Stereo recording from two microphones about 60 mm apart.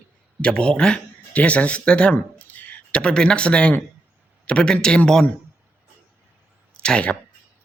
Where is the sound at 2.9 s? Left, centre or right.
Centre.